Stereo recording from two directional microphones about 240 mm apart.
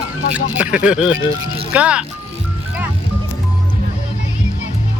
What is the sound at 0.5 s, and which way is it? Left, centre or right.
Speech, centre.